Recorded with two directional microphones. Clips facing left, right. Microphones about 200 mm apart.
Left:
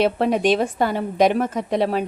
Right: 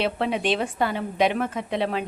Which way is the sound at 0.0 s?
45° left (ahead or behind).